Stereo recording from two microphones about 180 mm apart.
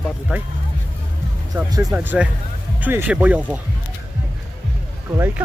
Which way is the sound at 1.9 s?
10° right (ahead or behind).